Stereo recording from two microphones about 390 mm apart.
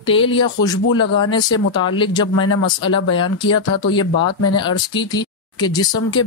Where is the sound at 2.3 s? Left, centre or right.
Left.